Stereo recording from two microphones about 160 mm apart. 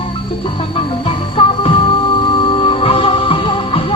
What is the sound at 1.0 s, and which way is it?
Music, 35° left (ahead or behind).